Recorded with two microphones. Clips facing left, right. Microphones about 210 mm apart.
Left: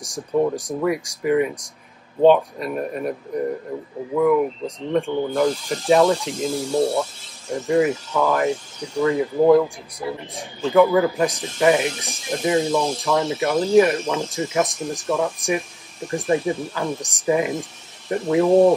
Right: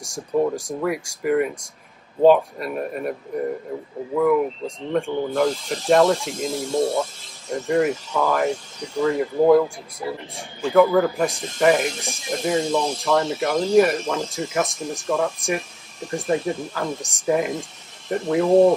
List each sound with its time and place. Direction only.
0.0 s speech: centre (ahead or behind)
4.2 s speech: centre (ahead or behind)